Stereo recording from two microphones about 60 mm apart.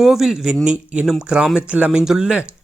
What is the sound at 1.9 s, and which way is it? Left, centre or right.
Speech, centre.